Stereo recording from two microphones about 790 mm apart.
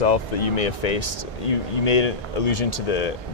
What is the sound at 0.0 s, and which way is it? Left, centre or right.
Speech, left.